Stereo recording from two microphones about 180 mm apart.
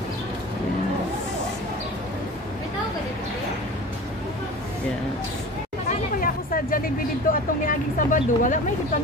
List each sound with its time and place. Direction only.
5.9 s chatter: 50° left (ahead or behind)
7.3 s speech: 50° left (ahead or behind)